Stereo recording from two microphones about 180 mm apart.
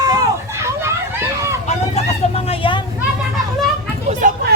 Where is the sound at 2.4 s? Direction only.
30° left (ahead or behind).